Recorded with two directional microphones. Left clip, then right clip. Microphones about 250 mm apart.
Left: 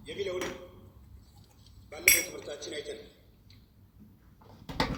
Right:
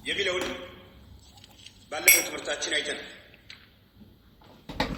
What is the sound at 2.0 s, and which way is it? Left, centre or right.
Speech, right.